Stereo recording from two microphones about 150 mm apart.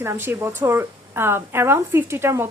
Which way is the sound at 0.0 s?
15° right (ahead or behind).